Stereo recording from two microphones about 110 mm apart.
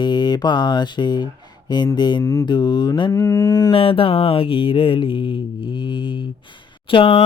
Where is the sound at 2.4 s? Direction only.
40° left (ahead or behind).